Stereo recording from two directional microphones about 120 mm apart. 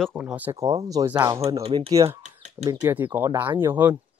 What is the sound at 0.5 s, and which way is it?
Speech, 30° right (ahead or behind).